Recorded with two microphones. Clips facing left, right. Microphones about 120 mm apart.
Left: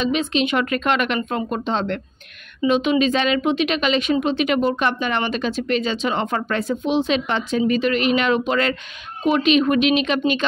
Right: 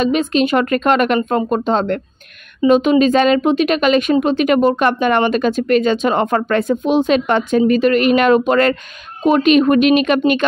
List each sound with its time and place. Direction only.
0.0 s speech: 45° right (ahead or behind)